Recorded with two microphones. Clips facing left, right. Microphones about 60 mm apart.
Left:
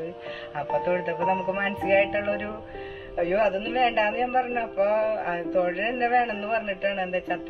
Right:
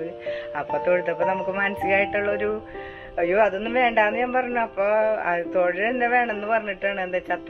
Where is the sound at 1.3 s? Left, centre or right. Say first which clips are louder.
Even; right.